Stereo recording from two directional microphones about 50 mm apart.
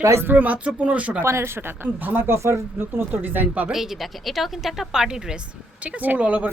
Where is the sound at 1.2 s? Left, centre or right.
Right.